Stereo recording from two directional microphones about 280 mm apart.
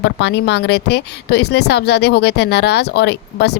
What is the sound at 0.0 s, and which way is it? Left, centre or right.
A woman's voice, left.